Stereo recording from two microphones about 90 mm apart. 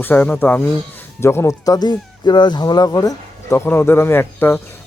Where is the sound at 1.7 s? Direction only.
50° left (ahead or behind).